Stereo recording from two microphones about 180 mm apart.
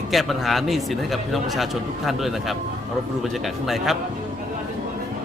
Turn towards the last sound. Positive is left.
turn(degrees=0)  # may be behind; listen again after turning